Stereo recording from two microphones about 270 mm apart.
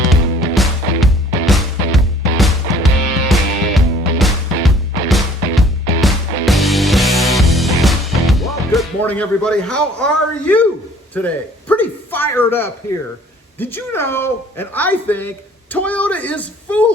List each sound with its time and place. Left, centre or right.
0.1 s music: centre
11.1 s speech: centre